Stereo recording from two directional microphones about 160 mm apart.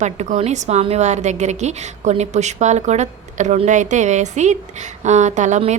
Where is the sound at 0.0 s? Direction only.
45° right (ahead or behind).